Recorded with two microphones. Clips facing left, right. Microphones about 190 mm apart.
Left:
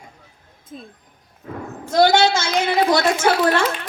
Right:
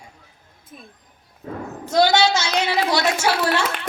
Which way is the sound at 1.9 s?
55° left (ahead or behind).